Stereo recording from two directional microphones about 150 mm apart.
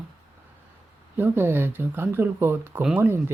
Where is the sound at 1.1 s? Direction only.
15° right (ahead or behind).